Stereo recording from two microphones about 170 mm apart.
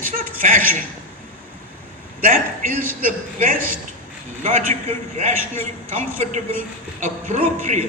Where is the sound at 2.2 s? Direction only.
55° right (ahead or behind).